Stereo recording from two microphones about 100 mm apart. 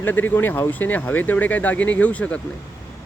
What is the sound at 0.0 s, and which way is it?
Speech, 20° left (ahead or behind).